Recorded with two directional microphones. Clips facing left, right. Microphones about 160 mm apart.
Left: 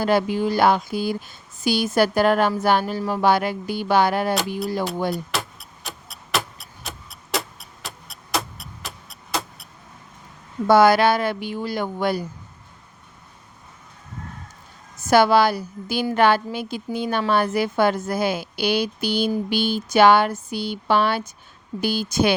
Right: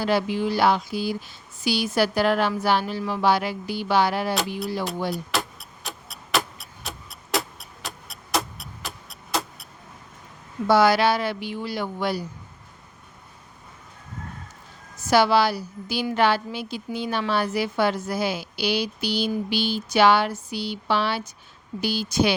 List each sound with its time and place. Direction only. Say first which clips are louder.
0.0 s a woman's voice: left 3 dB; 50° left (ahead or behind)
5.1 s a sound: even; centre (ahead or behind)
10.7 s a woman's voice: left 3 dB; 50° left (ahead or behind)
14.9 s a woman's voice: left 3 dB; 50° left (ahead or behind)